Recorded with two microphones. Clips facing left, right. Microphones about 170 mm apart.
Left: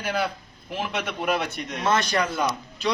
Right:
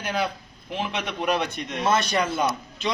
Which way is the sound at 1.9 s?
10° right (ahead or behind).